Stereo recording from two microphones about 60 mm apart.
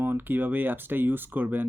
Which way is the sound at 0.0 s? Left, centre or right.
Right.